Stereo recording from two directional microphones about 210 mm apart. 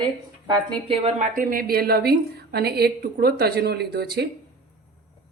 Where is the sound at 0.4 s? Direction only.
20° right (ahead or behind).